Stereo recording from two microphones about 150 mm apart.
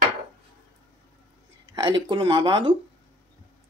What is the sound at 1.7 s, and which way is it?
Speech, 30° right (ahead or behind).